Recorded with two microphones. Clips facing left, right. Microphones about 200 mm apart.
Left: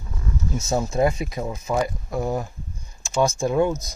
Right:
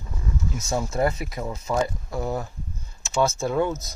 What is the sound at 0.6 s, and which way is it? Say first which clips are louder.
Speech: left 3 dB; 20° left (ahead or behind).